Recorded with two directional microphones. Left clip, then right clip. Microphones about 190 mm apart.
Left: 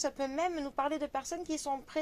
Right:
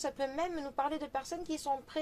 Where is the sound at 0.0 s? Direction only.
35° left (ahead or behind).